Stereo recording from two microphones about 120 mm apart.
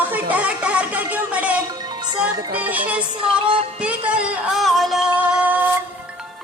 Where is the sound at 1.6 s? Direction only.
35° right (ahead or behind).